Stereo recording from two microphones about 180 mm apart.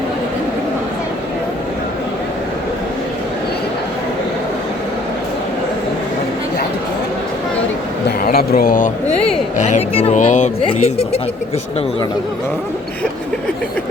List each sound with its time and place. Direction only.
8.2 s speech: 55° left (ahead or behind); by 11.2 s 35° left (ahead or behind)